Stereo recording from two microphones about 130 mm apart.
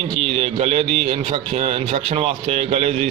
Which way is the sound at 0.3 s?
50° right (ahead or behind).